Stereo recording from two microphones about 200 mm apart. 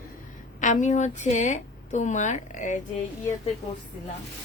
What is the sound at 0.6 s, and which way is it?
A woman's voice, 40° left (ahead or behind).